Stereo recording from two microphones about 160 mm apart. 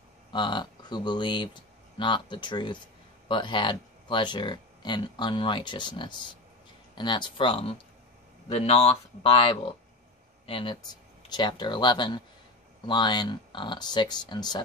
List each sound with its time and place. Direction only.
0.3 s speech: 30° left (ahead or behind)